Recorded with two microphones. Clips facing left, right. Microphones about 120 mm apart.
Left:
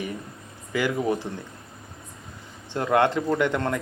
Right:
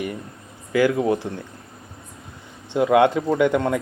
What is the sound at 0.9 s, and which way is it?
Speech, 15° right (ahead or behind).